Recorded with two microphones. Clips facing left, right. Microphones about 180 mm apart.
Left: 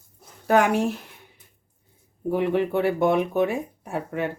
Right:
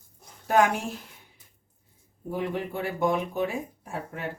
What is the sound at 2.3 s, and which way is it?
Speech, 65° left (ahead or behind).